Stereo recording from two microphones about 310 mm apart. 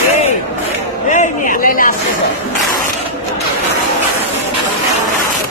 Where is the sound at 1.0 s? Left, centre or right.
Left.